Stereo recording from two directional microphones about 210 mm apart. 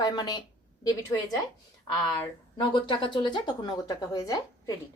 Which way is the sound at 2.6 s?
25° left (ahead or behind).